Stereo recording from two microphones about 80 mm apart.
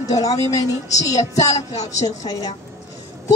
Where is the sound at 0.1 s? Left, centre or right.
Left.